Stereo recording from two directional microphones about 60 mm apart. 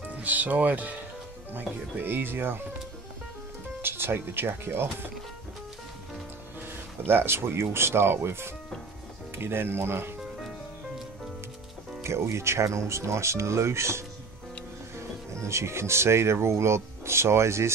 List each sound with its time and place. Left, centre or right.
0.1 s speech: right
3.8 s speech: right
7.1 s speech: right
12.0 s speech: right
15.4 s speech: right